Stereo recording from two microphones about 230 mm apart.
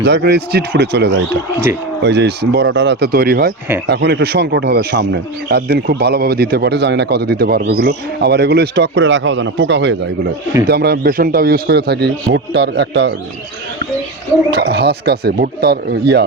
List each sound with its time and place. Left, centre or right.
0.0 s a man's voice: right
14.5 s a man's voice: right